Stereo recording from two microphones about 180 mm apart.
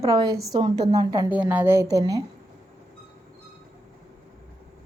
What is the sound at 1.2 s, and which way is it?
Speech, 10° right (ahead or behind).